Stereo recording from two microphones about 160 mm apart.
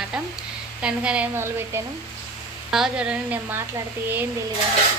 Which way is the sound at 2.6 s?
5° right (ahead or behind).